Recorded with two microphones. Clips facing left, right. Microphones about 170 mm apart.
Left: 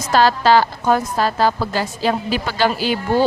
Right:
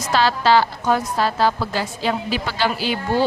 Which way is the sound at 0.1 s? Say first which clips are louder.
Left 3 dB; 45° left (ahead or behind).